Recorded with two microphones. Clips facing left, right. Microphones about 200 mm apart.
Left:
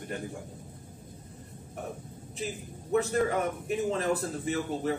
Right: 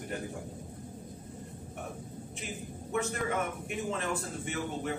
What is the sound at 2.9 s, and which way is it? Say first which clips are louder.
A man's voice: left 6 dB; 35° left (ahead or behind).